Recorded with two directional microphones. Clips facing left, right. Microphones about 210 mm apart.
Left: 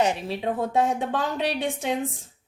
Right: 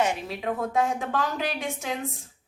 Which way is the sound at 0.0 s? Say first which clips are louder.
Left 2 dB; 30° left (ahead or behind).